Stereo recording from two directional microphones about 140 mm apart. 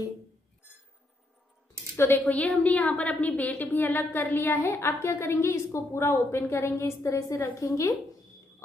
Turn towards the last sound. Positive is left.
turn(degrees=20)  # may be behind; listen again after turning